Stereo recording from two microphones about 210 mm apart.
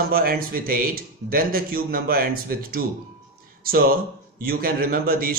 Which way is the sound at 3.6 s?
45° right (ahead or behind).